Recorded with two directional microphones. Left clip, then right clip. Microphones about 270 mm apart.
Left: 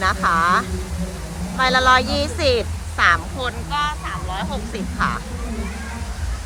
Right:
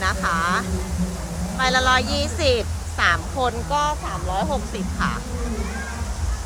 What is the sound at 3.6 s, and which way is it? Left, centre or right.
Speech, centre.